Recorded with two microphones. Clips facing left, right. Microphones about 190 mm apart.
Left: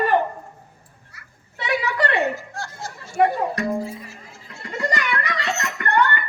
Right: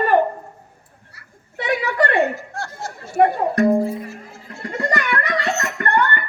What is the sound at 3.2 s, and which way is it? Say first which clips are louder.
Music: right 4 dB; 55° right (ahead or behind).